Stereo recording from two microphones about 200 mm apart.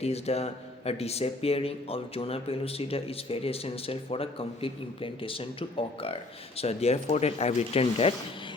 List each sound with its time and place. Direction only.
0.0 s speech: 30° left (ahead or behind)